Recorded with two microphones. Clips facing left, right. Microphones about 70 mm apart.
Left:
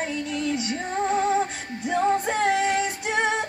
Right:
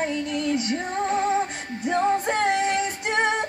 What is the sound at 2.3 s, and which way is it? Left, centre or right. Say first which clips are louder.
Music: even; right.